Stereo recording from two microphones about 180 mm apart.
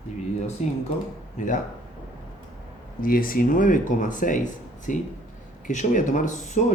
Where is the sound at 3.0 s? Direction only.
50° left (ahead or behind).